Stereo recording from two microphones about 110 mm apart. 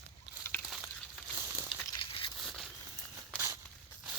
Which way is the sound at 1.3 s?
25° right (ahead or behind).